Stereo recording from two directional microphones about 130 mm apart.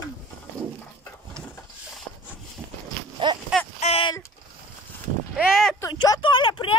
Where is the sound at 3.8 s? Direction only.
45° left (ahead or behind).